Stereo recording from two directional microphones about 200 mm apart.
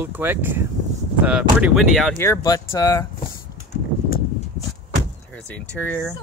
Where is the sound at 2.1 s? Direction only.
15° left (ahead or behind).